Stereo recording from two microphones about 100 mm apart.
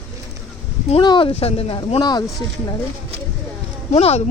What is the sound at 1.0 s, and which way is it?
Speech, 45° left (ahead or behind).